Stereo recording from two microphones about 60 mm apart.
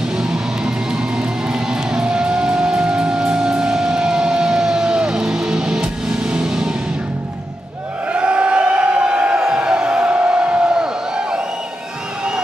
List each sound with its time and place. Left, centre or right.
0.2 s music: centre
8.1 s crowd: centre
9.4 s a sound: centre